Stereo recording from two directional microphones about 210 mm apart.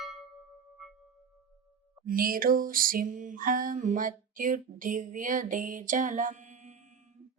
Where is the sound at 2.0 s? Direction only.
40° right (ahead or behind).